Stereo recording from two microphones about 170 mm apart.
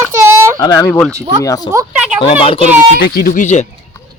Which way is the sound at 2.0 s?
5° right (ahead or behind).